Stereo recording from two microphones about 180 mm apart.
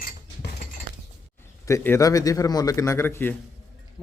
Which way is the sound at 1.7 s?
15° left (ahead or behind).